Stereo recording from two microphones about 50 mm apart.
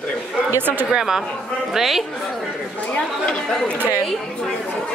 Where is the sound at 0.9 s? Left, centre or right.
Centre.